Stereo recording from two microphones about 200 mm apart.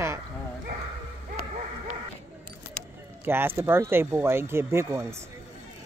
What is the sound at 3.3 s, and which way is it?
Speech, 10° right (ahead or behind).